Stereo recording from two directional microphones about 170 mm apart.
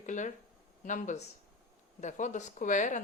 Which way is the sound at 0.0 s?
45° left (ahead or behind).